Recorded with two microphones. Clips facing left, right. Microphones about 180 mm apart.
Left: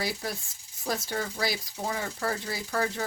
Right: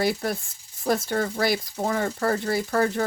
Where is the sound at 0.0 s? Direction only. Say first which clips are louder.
Right 8 dB; 60° right (ahead or behind).